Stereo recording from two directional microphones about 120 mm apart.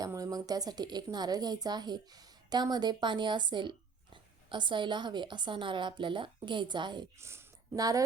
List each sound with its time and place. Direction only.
0.0 s speech: 30° right (ahead or behind)
7.2 s a woman's voice: 20° right (ahead or behind)